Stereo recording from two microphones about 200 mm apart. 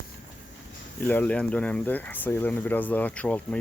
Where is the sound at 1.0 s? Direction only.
10° left (ahead or behind).